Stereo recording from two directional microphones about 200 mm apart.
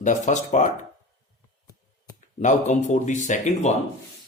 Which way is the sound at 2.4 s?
35° left (ahead or behind).